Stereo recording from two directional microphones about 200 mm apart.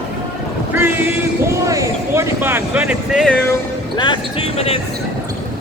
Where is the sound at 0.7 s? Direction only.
10° right (ahead or behind).